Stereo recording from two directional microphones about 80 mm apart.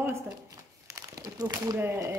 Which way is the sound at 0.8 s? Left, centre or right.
Right.